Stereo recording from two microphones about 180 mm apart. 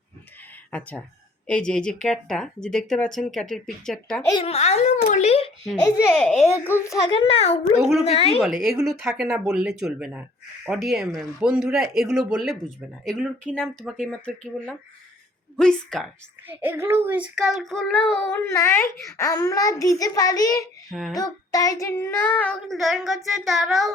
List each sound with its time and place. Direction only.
0.7 s child singing: 10° left (ahead or behind)
1.5 s speech: 5° left (ahead or behind)
4.3 s a child's voice: 30° left (ahead or behind)
6.1 s speech: centre (ahead or behind)
6.7 s child singing: 15° left (ahead or behind)
7.3 s a child's voice: 35° left (ahead or behind)
7.8 s speech: centre (ahead or behind)
8.0 s a child's voice: 35° left (ahead or behind)
8.4 s speech: centre (ahead or behind)
16.5 s a child's voice: 10° right (ahead or behind)
18.3 s a child's voice: 15° left (ahead or behind)
20.9 s speech: centre (ahead or behind)
21.2 s child singing: 20° left (ahead or behind); by 23.9 s centre (ahead or behind)